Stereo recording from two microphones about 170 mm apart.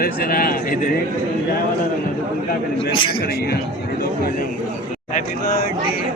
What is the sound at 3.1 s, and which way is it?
Speech, 65° left (ahead or behind).